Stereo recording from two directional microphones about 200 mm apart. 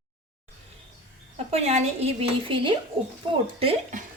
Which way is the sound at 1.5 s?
30° right (ahead or behind).